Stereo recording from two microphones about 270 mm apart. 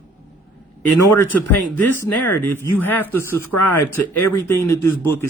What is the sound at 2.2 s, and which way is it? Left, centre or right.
A man's voice, centre.